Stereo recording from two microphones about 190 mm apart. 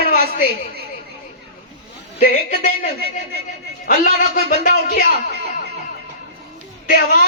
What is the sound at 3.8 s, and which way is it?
A man's voice, 50° left (ahead or behind).